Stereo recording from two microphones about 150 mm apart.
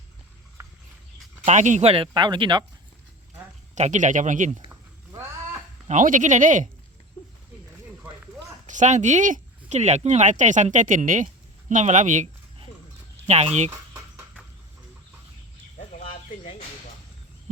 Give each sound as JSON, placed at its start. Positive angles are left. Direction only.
{"t": 1.5, "sound": "speech", "side_deg": -55}
{"t": 3.8, "sound": "speech", "side_deg": -55}
{"t": 4.7, "sound": "a sound", "side_deg": -15}
{"t": 5.9, "sound": "speech", "side_deg": -60}
{"t": 8.6, "sound": "speech", "side_deg": -55}
{"t": 13.7, "sound": "chicken", "side_deg": -15}